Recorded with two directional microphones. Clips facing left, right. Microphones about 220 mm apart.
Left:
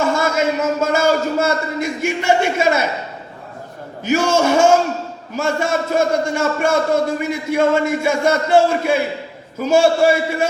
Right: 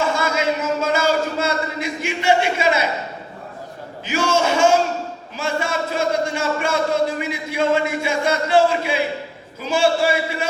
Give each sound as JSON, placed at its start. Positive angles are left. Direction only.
{"t": 0.0, "sound": "speech", "side_deg": 50}
{"t": 4.1, "sound": "a man's voice", "side_deg": 55}